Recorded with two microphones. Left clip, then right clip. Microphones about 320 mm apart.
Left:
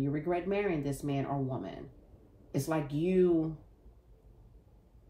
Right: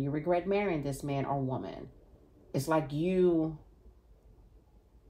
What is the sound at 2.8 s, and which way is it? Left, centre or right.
Speech, centre.